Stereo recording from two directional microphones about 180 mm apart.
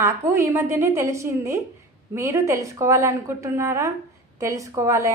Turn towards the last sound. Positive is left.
turn(degrees=-15)  # may be behind; listen again after turning